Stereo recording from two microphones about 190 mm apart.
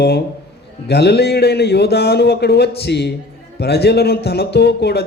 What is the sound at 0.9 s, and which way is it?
Speech, 60° left (ahead or behind).